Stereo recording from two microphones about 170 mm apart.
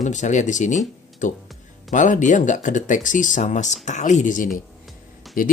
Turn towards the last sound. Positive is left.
turn(degrees=55)  # may be behind; listen again after turning